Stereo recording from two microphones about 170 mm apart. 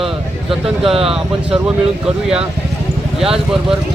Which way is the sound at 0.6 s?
Centre (ahead or behind).